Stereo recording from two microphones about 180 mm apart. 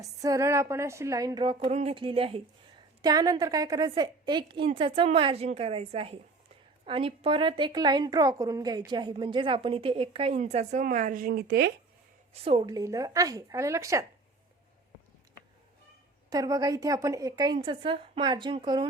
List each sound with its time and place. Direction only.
0.0 s a woman's voice: 20° right (ahead or behind)
3.0 s a woman's voice: 20° right (ahead or behind); by 11.7 s 65° right (ahead or behind)
12.3 s a woman's voice: 30° right (ahead or behind)
16.3 s a woman's voice: 20° right (ahead or behind)